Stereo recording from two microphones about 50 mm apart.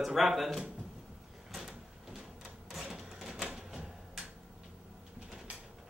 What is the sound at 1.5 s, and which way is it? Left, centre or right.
Printer, centre.